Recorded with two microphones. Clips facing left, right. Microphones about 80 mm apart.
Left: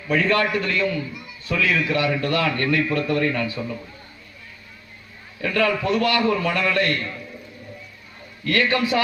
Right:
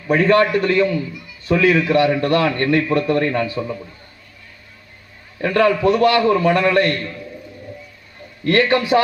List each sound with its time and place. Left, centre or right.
0.1 s a man's voice: right
5.4 s a man's voice: right
8.4 s a man's voice: right